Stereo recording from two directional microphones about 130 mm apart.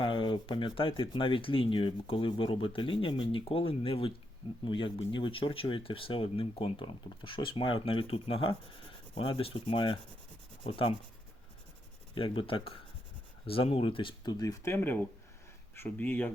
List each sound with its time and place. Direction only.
0.0 s speech: 40° left (ahead or behind)
12.1 s speech: 45° left (ahead or behind); by 16.3 s 15° left (ahead or behind)